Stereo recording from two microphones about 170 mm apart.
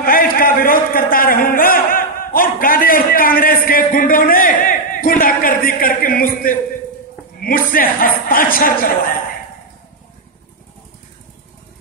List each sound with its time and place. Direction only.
0.0 s a man's voice: 60° left (ahead or behind)